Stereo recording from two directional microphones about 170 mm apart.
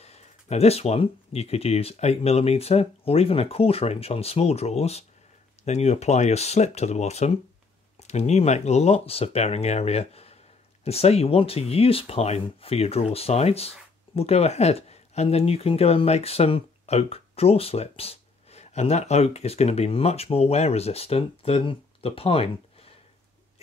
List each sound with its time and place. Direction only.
0.0 s speech: 40° left (ahead or behind)